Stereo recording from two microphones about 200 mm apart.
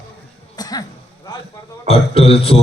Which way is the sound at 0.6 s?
20° left (ahead or behind).